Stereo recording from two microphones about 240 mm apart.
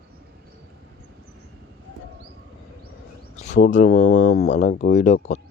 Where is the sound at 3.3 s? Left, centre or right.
Left.